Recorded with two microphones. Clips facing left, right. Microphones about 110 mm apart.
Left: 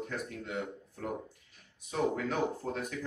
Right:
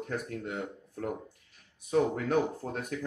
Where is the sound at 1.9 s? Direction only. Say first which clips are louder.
Right 5 dB; 50° right (ahead or behind).